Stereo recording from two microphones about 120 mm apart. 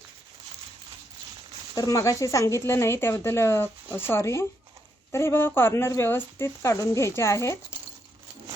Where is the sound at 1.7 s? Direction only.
25° left (ahead or behind).